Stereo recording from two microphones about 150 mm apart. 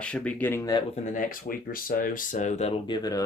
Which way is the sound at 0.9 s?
55° left (ahead or behind).